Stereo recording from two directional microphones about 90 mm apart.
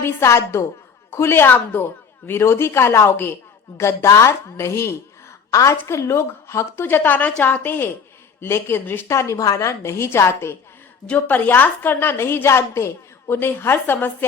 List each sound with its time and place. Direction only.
0.0 s a woman's voice: 30° left (ahead or behind)
11.0 s a woman's voice: 15° left (ahead or behind)